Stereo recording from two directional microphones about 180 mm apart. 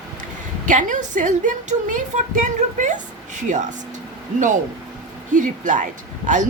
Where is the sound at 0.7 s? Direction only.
45° right (ahead or behind).